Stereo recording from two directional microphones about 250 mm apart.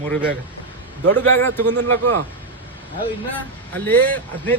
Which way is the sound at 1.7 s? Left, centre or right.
Right.